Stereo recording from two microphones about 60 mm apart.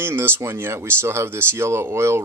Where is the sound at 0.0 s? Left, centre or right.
Right.